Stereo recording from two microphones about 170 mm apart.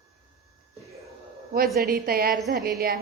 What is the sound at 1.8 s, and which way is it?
Speech, 60° right (ahead or behind).